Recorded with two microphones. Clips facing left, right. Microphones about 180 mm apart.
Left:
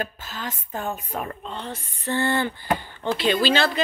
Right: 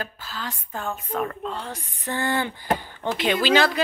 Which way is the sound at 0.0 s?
20° left (ahead or behind).